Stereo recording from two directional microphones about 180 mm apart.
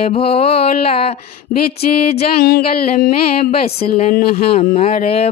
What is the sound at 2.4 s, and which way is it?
Music, 50° left (ahead or behind).